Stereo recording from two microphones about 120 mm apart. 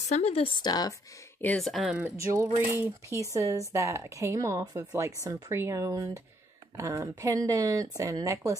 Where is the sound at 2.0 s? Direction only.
25° right (ahead or behind).